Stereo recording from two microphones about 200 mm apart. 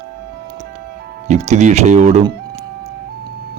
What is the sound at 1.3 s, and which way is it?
Speech, 35° right (ahead or behind).